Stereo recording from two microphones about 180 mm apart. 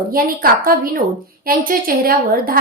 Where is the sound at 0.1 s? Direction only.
55° right (ahead or behind).